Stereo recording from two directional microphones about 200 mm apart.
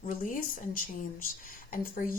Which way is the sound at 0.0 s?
40° left (ahead or behind).